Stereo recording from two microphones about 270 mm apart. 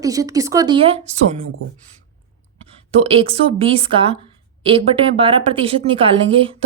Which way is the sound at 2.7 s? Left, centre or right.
Right.